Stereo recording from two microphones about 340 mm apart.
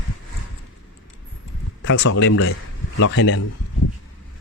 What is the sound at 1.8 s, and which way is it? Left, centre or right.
Speech, left.